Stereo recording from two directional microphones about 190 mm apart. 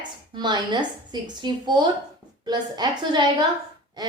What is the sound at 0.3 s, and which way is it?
A woman's voice, 25° right (ahead or behind).